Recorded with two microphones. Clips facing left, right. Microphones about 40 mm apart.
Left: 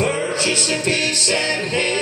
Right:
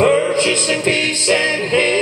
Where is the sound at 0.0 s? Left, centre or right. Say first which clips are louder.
Right 6 dB; right.